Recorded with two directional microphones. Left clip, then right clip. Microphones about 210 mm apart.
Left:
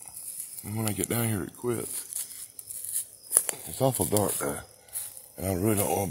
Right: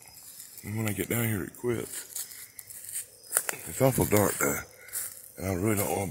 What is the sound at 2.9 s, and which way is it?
Tearing, 15° left (ahead or behind).